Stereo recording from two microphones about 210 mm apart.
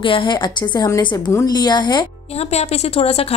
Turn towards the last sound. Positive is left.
turn(degrees=30)  # may be behind; listen again after turning